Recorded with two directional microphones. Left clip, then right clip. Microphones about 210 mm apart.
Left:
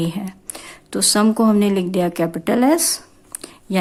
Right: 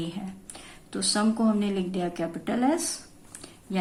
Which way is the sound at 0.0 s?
40° left (ahead or behind).